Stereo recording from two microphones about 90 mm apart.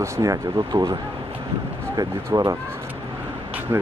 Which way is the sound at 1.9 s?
40° right (ahead or behind).